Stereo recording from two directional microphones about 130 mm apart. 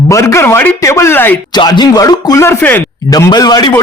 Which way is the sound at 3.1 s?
30° left (ahead or behind).